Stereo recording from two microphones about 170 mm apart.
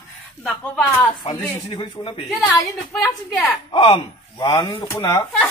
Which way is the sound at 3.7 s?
30° left (ahead or behind).